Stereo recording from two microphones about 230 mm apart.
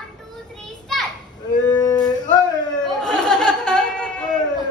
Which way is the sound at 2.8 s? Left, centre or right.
Centre.